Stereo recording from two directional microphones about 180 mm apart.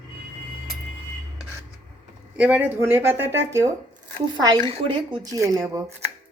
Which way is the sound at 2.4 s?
10° right (ahead or behind).